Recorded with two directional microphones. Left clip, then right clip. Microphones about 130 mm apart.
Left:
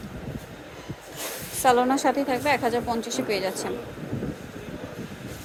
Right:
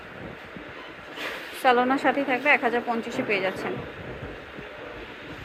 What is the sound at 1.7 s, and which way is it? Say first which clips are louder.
A woman's voice: even; 40° left (ahead or behind).